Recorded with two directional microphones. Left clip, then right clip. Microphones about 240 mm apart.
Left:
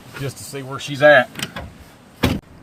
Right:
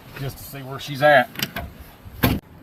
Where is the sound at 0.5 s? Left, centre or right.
Left.